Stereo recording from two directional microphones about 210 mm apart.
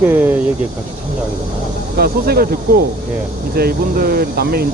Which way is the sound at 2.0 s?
45° right (ahead or behind).